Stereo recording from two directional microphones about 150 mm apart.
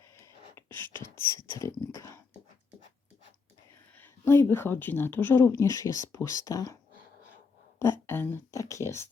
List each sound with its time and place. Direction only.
0.2 s a sound: 15° left (ahead or behind)
3.9 s a woman's voice: 15° left (ahead or behind)
7.8 s speech: 15° left (ahead or behind)